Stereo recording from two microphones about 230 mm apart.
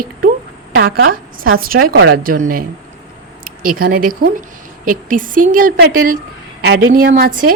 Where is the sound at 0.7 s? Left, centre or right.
Right.